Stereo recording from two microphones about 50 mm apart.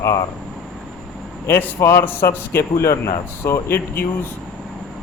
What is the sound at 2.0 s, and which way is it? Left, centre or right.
Speech, left.